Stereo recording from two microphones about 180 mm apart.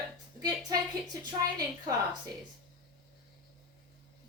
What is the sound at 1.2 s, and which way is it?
Speech, 20° right (ahead or behind).